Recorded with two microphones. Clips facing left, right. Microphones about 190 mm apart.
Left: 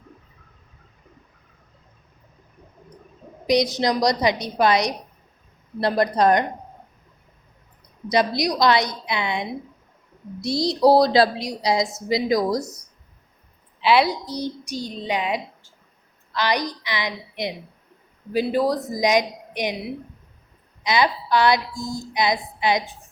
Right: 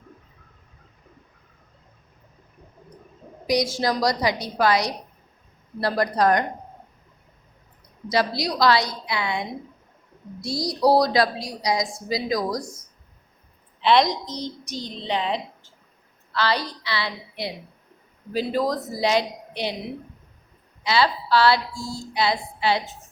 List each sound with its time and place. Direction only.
3.4 s a woman's voice: 20° left (ahead or behind)
8.1 s a woman's voice: 20° left (ahead or behind)
13.8 s a woman's voice: 5° left (ahead or behind)
20.8 s a woman's voice: 15° left (ahead or behind)